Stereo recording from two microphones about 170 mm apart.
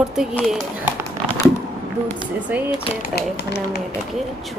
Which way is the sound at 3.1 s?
80° left.